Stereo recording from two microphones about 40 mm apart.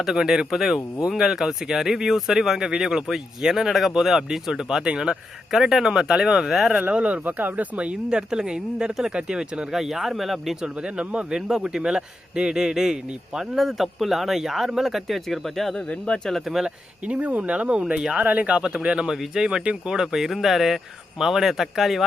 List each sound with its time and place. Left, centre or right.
0.0 s speech: centre
5.5 s speech: centre
6.9 s speech: right
8.1 s speech: centre
9.7 s speech: centre
10.6 s speech: right
13.6 s speech: centre
15.7 s speech: left
16.5 s speech: centre
17.1 s speech: right
19.0 s speech: centre
20.1 s speech: centre